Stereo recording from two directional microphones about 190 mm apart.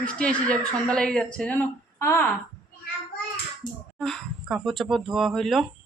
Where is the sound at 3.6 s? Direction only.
25° left (ahead or behind).